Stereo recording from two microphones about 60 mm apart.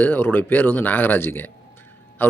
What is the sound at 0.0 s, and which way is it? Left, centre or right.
Speech, left.